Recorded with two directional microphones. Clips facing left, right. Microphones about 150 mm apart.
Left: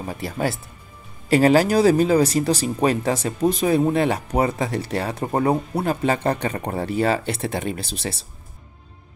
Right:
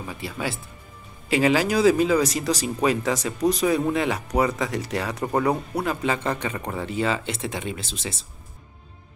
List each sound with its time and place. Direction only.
0.0 s speech: 40° left (ahead or behind)